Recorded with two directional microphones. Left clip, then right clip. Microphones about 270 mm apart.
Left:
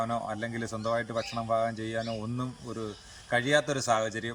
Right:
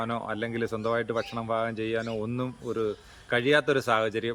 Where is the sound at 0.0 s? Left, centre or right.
Centre.